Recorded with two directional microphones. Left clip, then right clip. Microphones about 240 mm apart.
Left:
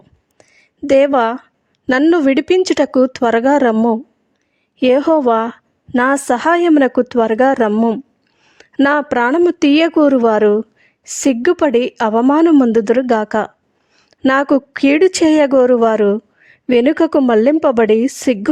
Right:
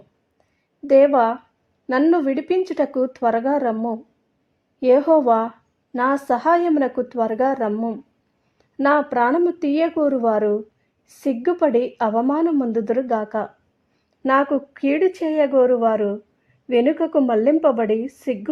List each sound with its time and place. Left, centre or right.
0.9 s a woman's voice: left
4.9 s a woman's voice: left